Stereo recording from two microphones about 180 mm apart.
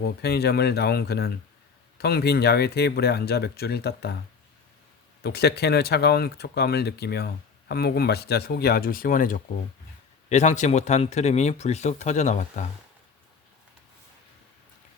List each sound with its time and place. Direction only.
0.0 s speech: 65° left (ahead or behind)
5.2 s speech: 65° left (ahead or behind); by 12.6 s 40° left (ahead or behind)